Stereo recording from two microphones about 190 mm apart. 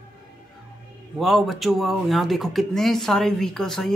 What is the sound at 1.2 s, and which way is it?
Speech, centre (ahead or behind).